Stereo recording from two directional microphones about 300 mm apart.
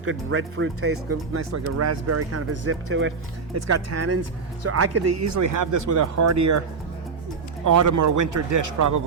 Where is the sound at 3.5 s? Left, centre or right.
Right.